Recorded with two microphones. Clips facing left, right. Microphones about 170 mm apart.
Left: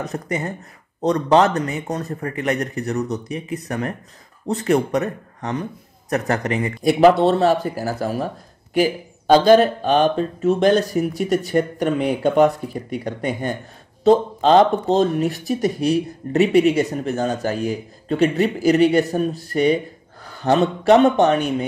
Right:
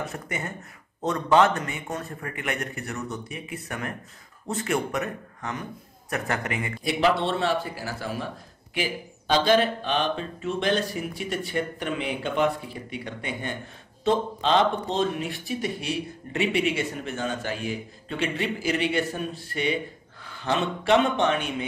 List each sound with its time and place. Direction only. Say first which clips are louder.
0.0 s speech: left 7 dB; 35° left (ahead or behind)